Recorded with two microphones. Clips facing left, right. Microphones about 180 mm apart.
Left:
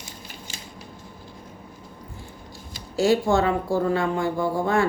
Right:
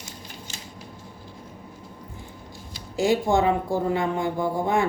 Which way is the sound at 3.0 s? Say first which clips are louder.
Left 1 dB; 20° right (ahead or behind).